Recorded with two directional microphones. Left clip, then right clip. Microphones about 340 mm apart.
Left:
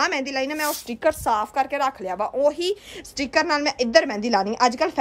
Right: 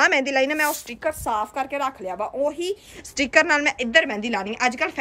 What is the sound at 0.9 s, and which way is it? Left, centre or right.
Speech, left.